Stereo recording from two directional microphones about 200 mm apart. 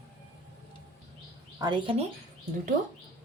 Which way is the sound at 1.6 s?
25° right (ahead or behind).